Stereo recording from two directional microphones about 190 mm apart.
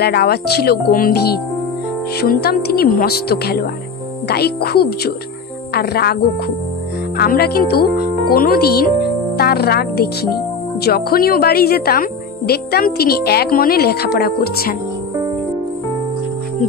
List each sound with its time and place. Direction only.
0.0 s a woman's voice: 55° left (ahead or behind)
7.2 s a woman's voice: 55° left (ahead or behind)